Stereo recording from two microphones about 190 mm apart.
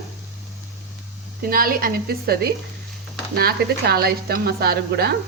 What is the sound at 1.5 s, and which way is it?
A woman's voice, 50° right (ahead or behind).